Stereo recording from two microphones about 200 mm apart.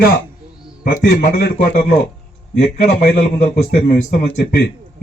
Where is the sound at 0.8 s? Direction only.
55° left (ahead or behind).